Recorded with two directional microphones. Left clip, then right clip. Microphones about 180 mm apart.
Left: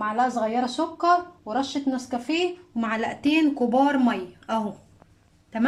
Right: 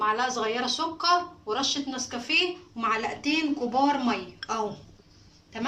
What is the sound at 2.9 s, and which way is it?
A woman's voice, 70° left (ahead or behind).